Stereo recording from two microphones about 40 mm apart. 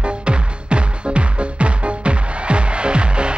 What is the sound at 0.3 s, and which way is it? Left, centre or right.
Music, right.